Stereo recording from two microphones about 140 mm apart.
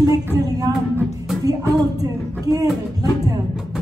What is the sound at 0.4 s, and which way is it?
Music, 25° right (ahead or behind).